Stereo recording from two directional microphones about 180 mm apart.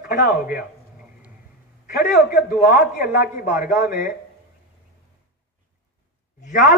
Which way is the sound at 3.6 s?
50° left (ahead or behind).